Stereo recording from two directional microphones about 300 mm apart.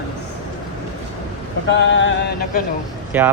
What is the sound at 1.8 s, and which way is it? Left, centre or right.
Music, left.